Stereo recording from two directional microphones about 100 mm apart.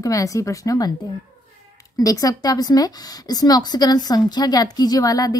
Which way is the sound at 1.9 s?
35° left (ahead or behind).